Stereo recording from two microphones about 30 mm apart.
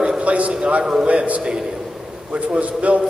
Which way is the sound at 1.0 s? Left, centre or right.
Right.